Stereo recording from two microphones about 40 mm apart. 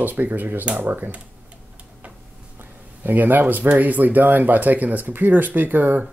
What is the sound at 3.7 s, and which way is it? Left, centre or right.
Speech, right.